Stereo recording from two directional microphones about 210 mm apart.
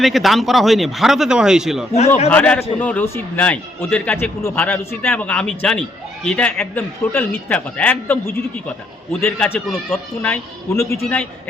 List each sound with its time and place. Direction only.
0.0 s a man's voice: centre (ahead or behind)
9.2 s a man's voice: 5° left (ahead or behind)